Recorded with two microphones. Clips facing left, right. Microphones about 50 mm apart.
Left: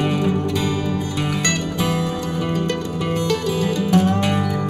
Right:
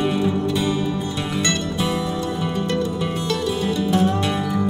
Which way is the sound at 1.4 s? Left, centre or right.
Left.